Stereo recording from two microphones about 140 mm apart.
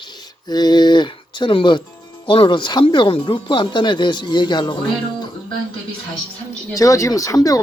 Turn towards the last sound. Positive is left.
turn(degrees=25)  # may be behind; listen again after turning